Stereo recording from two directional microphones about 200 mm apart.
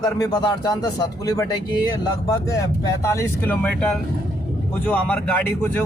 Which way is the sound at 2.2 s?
15° left (ahead or behind).